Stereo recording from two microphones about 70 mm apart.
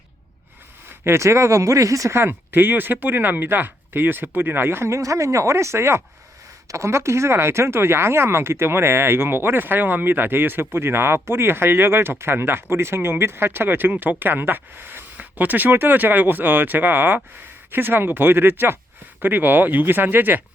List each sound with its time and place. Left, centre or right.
0.9 s speech: right
2.1 s speech: right